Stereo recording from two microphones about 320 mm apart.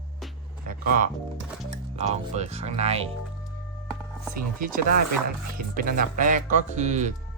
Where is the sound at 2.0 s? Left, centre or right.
Centre.